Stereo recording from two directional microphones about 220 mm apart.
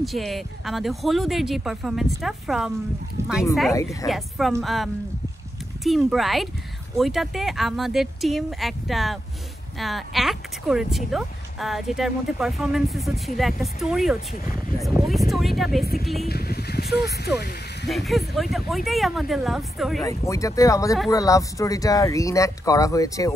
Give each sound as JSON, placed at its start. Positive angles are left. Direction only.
{"t": 0.0, "sound": "speech", "side_deg": 0}
{"t": 3.7, "sound": "speech", "side_deg": 15}
{"t": 4.1, "sound": "speech", "side_deg": 0}
{"t": 16.3, "sound": "speech", "side_deg": 45}
{"t": 17.8, "sound": "speech", "side_deg": 0}
{"t": 20.1, "sound": "speech", "side_deg": 15}